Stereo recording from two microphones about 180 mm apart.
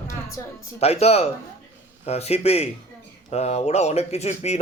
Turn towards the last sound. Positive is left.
turn(degrees=35)  # may be behind; listen again after turning